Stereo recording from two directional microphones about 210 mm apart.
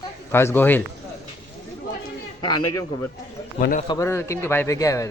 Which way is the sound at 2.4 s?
20° left (ahead or behind).